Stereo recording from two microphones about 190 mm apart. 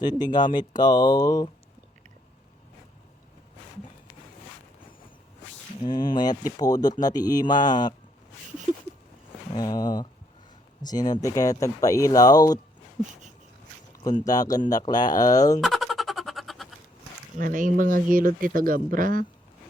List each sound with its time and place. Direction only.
0.2 s speech: 20° left (ahead or behind)
5.8 s speech: 25° left (ahead or behind)
9.6 s speech: 20° left (ahead or behind)
14.0 s speech: 20° left (ahead or behind)
15.6 s music: centre (ahead or behind)
17.3 s speech: 45° right (ahead or behind)